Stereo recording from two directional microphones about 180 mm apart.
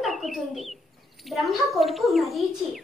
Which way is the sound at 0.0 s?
Centre (ahead or behind).